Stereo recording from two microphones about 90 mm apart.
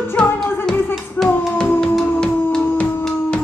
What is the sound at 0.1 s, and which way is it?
Music, 10° left (ahead or behind).